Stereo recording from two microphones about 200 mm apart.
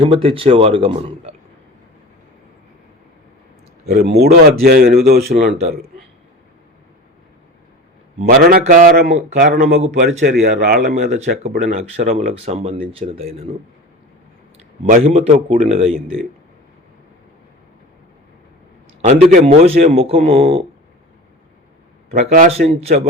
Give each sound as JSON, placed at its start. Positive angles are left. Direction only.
{"t": 0.0, "sound": "a man's voice", "side_deg": -25}
{"t": 3.8, "sound": "speech", "side_deg": -50}
{"t": 8.2, "sound": "speech", "side_deg": -45}
{"t": 11.9, "sound": "speech", "side_deg": -35}
{"t": 14.8, "sound": "speech", "side_deg": -40}
{"t": 15.9, "sound": "speech", "side_deg": 5}
{"t": 19.0, "sound": "a man's voice", "side_deg": -35}
{"t": 22.1, "sound": "speech", "side_deg": -40}